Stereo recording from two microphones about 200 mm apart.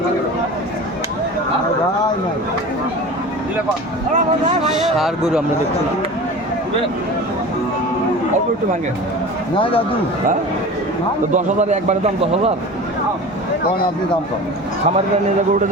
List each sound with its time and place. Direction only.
4.7 s speech: centre (ahead or behind)
9.6 s speech: 25° left (ahead or behind)
11.3 s a man's voice: 35° right (ahead or behind)